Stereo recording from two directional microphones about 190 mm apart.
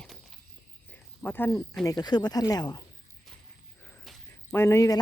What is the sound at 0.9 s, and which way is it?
Cricket, 10° left (ahead or behind).